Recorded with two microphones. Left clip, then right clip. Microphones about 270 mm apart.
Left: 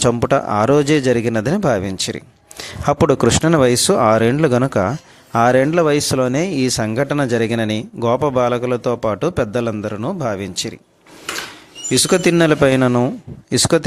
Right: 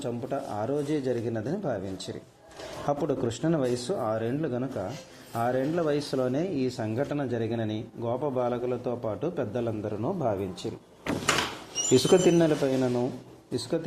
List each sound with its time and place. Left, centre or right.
0.0 s speech: left
11.9 s speech: left